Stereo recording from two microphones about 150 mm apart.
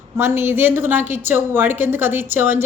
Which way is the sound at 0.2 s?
15° right (ahead or behind).